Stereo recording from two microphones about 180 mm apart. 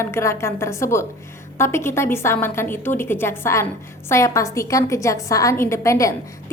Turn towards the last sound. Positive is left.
turn(degrees=15)  # may be behind; listen again after turning